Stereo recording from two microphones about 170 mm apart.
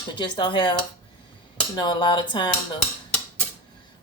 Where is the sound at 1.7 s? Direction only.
25° left (ahead or behind).